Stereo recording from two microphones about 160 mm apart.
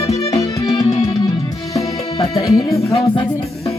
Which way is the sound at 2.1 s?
40° left (ahead or behind).